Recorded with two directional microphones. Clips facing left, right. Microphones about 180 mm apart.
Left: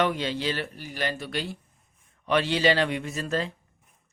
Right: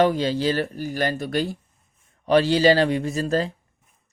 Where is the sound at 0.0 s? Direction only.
35° right (ahead or behind).